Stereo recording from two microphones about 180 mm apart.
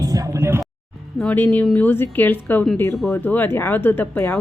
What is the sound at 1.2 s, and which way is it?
A woman's voice, 10° left (ahead or behind).